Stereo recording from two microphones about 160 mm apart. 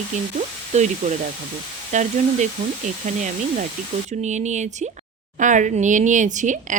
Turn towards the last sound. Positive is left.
turn(degrees=-50)  # may be behind; listen again after turning